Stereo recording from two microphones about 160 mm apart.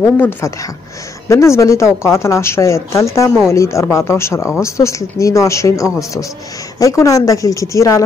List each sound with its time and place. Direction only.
0.0 s speech: 10° left (ahead or behind)